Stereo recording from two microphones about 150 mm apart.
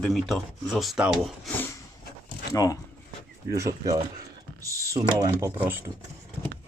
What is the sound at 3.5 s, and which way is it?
Speech, 20° right (ahead or behind).